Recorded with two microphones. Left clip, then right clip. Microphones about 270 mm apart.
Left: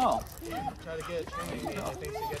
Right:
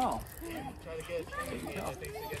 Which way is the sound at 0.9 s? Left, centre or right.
Left.